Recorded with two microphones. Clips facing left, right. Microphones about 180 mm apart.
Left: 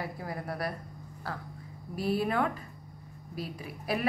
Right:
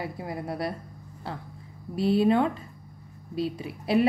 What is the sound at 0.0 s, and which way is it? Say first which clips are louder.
Speech: right 4 dB; 25° right (ahead or behind).